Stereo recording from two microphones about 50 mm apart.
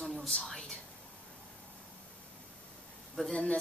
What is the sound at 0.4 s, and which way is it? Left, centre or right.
Whispering, centre.